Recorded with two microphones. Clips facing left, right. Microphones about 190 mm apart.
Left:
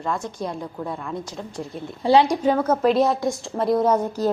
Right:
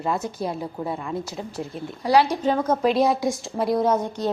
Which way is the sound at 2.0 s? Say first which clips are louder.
Left 2 dB; 25° left (ahead or behind).